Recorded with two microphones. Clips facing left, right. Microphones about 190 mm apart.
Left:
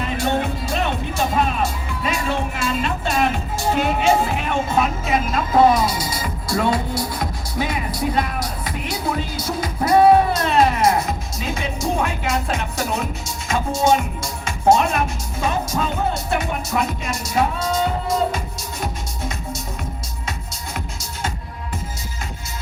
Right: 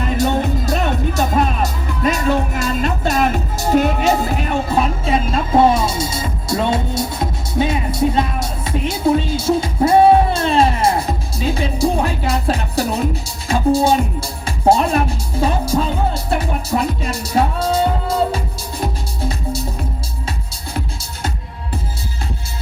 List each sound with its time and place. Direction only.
0.2 s music: 40° right (ahead or behind)
20.7 s music: 35° right (ahead or behind)